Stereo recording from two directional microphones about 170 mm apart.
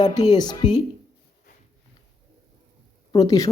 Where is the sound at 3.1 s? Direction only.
20° left (ahead or behind).